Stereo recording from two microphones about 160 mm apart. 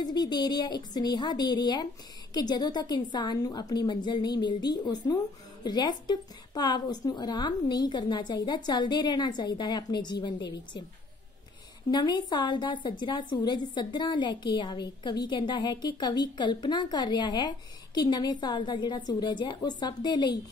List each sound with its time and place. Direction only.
0.0 s a woman's voice: 25° left (ahead or behind)
11.9 s a woman's voice: 25° left (ahead or behind)